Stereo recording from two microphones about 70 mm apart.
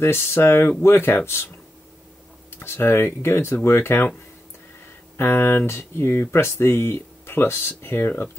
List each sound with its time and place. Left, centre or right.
0.0 s speech: left
2.5 s speech: left
5.1 s speech: left